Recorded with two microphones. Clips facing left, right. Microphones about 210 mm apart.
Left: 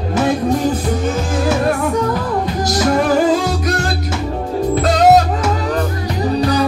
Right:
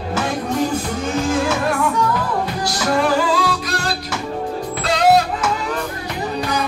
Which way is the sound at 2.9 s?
45° left (ahead or behind).